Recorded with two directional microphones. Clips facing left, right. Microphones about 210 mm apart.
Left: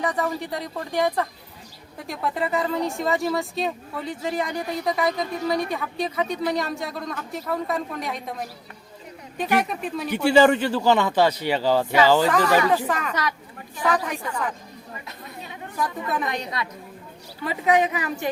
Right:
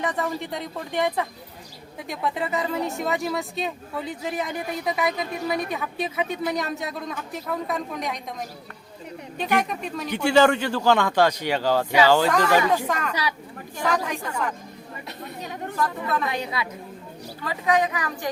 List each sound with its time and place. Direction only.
0.0 s speech: centre (ahead or behind)
16.4 s speech: 5° right (ahead or behind)
17.4 s a woman's voice: 20° left (ahead or behind)